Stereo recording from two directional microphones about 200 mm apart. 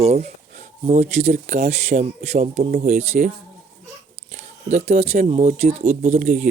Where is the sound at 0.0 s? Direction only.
30° right (ahead or behind).